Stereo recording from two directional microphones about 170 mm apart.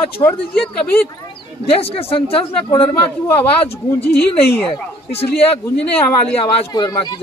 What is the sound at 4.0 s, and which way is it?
Speech, 10° left (ahead or behind).